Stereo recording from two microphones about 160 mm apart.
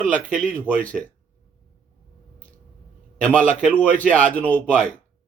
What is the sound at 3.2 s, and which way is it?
Speech, 5° left (ahead or behind).